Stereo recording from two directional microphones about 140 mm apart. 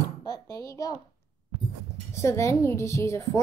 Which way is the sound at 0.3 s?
25° left (ahead or behind).